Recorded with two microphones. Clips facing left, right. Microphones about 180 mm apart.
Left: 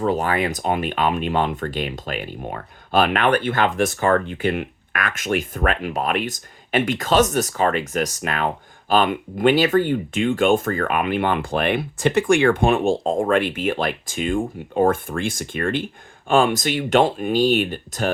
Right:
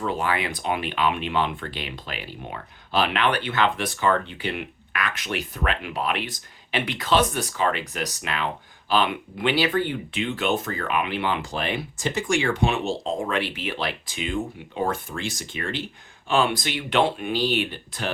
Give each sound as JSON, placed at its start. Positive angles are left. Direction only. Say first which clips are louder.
{"t": 0.0, "sound": "speech", "louder": "left 5 dB", "side_deg": 40}